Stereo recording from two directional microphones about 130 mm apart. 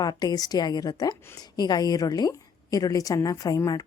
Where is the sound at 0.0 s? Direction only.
30° left (ahead or behind).